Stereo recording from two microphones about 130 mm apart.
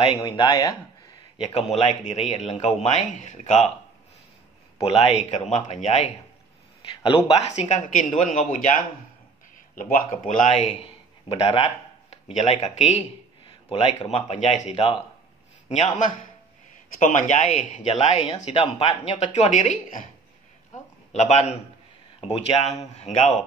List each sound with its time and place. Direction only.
0.2 s speech: 30° left (ahead or behind)
1.4 s a man's voice: 50° left (ahead or behind)
4.8 s a man's voice: 50° left (ahead or behind)
7.0 s a man's voice: 45° left (ahead or behind); by 10.0 s 90° left
10.0 s a man's voice: 70° left (ahead or behind)
11.2 s a sound: 45° left (ahead or behind)
12.4 s a man's voice: 60° left (ahead or behind)
13.5 s a sound: 40° left (ahead or behind)
14.2 s a man's voice: 60° left (ahead or behind)
15.7 s a man's voice: 70° left (ahead or behind)
17.0 s a man's voice: 80° left
21.1 s a man's voice: 60° left (ahead or behind)